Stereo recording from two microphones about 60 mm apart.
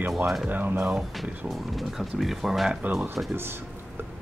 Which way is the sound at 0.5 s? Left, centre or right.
Right.